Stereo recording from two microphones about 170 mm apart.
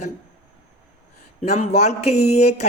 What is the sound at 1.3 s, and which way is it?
Speech, 40° left (ahead or behind).